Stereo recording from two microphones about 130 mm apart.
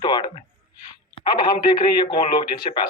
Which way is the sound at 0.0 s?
35° left (ahead or behind).